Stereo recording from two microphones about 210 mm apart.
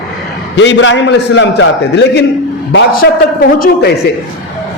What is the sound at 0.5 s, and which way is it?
A man's voice, 60° left (ahead or behind).